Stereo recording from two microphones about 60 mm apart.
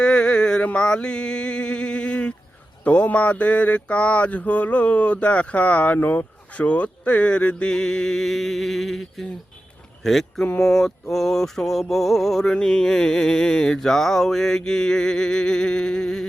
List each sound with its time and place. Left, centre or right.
0.0 s mantra: centre
10.0 s speech: centre
10.6 s a sound: centre